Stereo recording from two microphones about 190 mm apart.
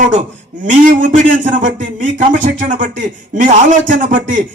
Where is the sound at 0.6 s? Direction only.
45° right (ahead or behind).